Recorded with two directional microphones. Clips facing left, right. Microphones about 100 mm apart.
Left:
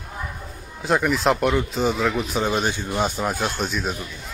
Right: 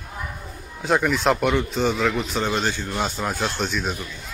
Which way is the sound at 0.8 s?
Centre (ahead or behind).